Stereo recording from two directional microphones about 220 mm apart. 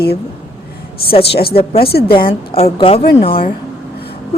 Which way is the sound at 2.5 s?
25° left (ahead or behind).